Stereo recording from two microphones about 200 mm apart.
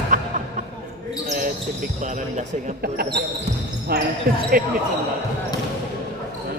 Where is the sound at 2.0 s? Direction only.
35° right (ahead or behind).